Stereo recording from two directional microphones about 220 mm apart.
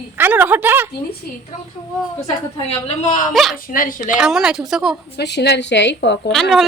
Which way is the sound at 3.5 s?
40° left (ahead or behind).